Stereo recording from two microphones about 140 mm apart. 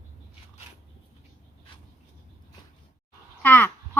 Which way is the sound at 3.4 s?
10° left (ahead or behind).